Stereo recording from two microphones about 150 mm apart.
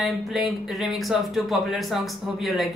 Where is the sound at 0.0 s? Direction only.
Centre (ahead or behind).